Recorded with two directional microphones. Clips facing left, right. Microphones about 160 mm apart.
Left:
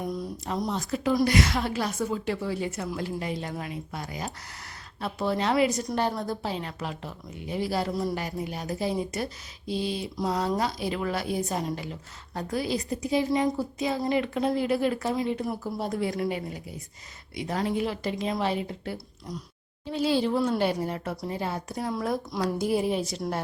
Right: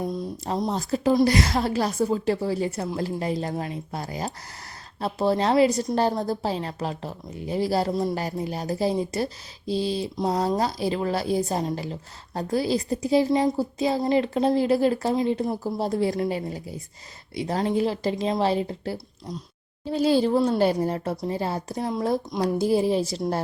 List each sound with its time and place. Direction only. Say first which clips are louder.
0.0 s a woman's voice: right 3 dB; 25° right (ahead or behind)